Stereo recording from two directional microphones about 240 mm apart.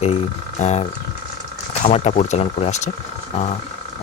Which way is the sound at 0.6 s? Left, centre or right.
Left.